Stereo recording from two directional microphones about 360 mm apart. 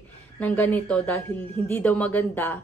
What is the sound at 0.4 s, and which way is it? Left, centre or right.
A woman's voice, centre.